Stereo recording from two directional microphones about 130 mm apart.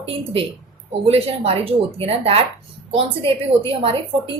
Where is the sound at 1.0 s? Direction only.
50° right (ahead or behind).